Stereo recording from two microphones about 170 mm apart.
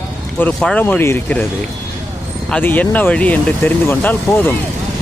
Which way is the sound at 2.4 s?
5° left (ahead or behind).